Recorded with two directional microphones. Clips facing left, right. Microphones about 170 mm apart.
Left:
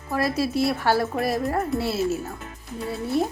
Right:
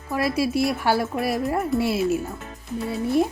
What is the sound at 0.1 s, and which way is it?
Speech, 10° right (ahead or behind).